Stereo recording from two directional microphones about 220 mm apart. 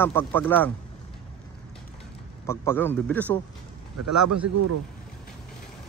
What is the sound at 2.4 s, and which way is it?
Speech, 10° left (ahead or behind).